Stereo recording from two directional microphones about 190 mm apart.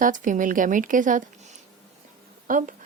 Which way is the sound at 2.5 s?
45° right (ahead or behind).